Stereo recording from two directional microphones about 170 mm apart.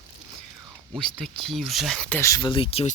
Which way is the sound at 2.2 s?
15° left (ahead or behind).